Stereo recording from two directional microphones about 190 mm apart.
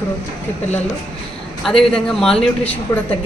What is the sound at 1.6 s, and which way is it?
A man's voice, centre (ahead or behind).